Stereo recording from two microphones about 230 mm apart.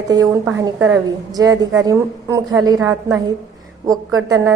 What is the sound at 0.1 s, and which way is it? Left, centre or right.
A woman's voice, centre.